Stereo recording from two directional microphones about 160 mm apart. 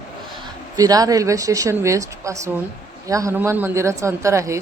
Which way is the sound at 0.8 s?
20° right (ahead or behind).